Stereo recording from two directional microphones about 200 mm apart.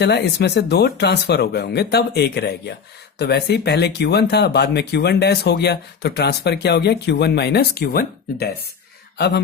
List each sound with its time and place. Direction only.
0.0 s speech: 55° left (ahead or behind)